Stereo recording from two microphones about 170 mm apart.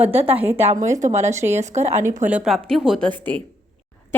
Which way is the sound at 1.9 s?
15° right (ahead or behind).